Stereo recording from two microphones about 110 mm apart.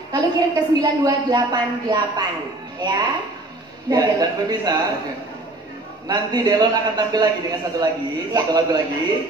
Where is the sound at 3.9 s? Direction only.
35° right (ahead or behind).